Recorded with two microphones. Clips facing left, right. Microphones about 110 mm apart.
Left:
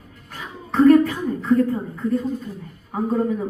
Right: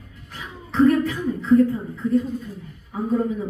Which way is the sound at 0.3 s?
45° left (ahead or behind).